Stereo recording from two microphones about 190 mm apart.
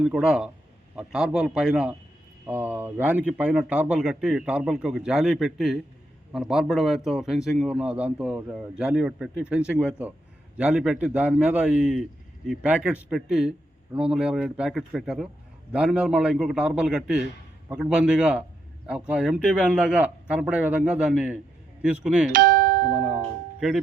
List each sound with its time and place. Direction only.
0.0 s a man's voice: 5° right (ahead or behind)
22.3 s doorbell: 45° right (ahead or behind)
23.6 s speech: centre (ahead or behind)